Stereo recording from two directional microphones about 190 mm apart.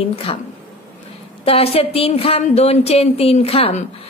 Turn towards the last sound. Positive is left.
turn(degrees=30)  # may be behind; listen again after turning